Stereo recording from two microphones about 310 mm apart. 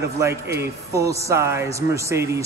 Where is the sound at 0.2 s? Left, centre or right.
Centre.